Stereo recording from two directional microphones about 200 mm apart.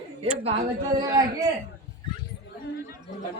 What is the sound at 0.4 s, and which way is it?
Speech, 30° right (ahead or behind).